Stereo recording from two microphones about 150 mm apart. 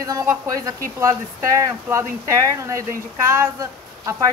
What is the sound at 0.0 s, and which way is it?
Speech, 20° right (ahead or behind).